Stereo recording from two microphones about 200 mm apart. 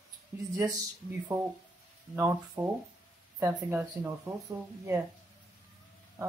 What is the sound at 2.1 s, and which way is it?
Speech, 15° right (ahead or behind).